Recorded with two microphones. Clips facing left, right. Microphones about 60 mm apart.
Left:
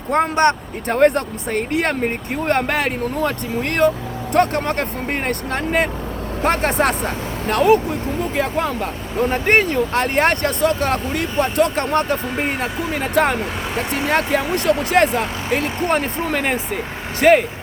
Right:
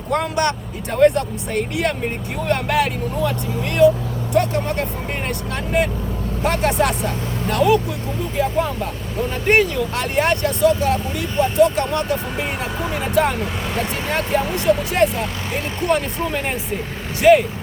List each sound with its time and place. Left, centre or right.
0.1 s speech: left
0.9 s speech: left
8.4 s speech: left
9.3 s speech: left
15.8 s speech: left
16.2 s speech: left